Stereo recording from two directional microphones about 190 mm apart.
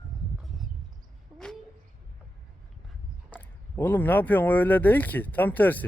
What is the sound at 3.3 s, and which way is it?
Speech, 10° left (ahead or behind).